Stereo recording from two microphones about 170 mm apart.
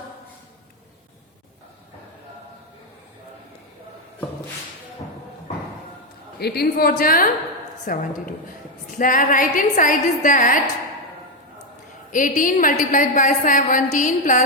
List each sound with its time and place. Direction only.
6.4 s a woman's voice: 65° left (ahead or behind)
12.1 s a woman's voice: 50° left (ahead or behind)